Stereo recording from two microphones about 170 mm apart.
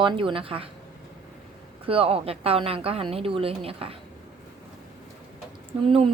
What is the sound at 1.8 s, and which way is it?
A woman's voice, 35° right (ahead or behind).